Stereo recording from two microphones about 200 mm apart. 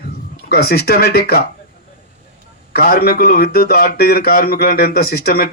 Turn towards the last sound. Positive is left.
turn(degrees=50)  # may be behind; listen again after turning